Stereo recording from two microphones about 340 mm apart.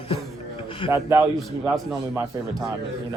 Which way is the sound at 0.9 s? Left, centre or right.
Centre.